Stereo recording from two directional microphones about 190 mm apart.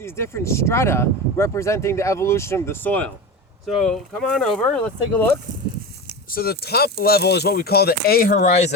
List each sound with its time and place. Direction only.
0.0 s speech: 15° left (ahead or behind)
6.3 s speech: 55° left (ahead or behind); by 8.7 s 35° left (ahead or behind)